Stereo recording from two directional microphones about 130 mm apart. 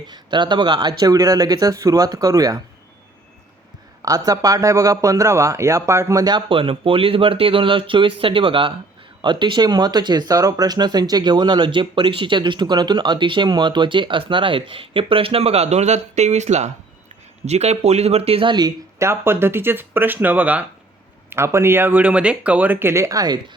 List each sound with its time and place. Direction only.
0.1 s speech: 35° right (ahead or behind)
4.0 s speech: 30° right (ahead or behind)
18.9 s speech: 20° right (ahead or behind)